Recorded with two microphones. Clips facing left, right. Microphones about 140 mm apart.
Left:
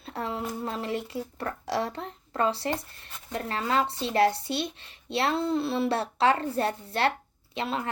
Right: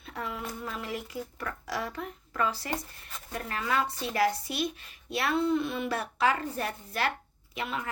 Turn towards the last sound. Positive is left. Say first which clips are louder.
# left 4 dB
turn(degrees=30)  # may be behind; listen again after turning